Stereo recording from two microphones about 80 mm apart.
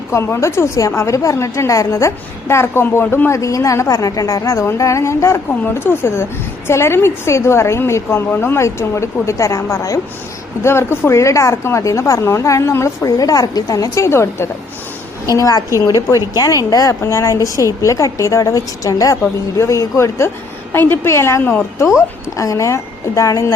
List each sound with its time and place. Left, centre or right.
0.1 s a woman's voice: left
10.6 s a woman's voice: left
13.1 s a woman's voice: left
15.3 s a woman's voice: left
16.9 s a woman's voice: left
21.4 s a woman's voice: left
22.4 s a woman's voice: left